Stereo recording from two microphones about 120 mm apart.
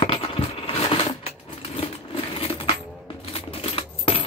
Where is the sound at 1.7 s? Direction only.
50° left (ahead or behind).